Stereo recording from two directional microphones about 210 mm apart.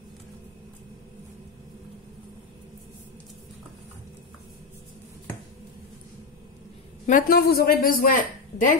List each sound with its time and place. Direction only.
7.1 s a woman's voice: 45° left (ahead or behind)